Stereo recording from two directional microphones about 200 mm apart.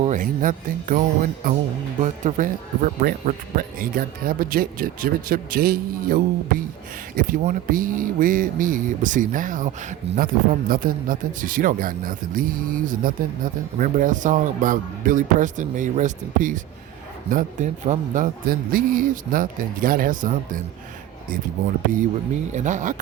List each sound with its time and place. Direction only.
0.0 s speech: 40° right (ahead or behind)
7.2 s a man's voice: 45° right (ahead or behind)
22.5 s a man's voice: 40° right (ahead or behind)